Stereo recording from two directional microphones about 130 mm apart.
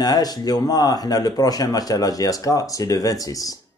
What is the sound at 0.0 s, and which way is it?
Speech, 30° left (ahead or behind).